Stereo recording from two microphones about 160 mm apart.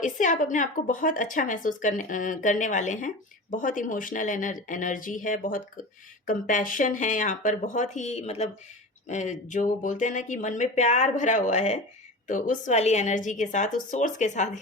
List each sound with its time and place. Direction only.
0.0 s speech: 50° left (ahead or behind)